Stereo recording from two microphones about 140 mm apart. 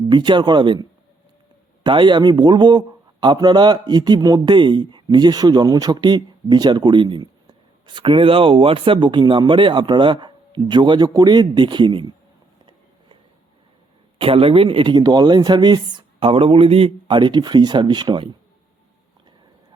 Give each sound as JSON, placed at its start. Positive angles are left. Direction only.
{"t": 0.1, "sound": "speech", "side_deg": -35}
{"t": 14.2, "sound": "speech", "side_deg": -40}